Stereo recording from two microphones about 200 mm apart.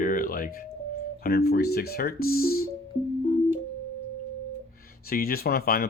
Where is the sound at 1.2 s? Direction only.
50° left (ahead or behind).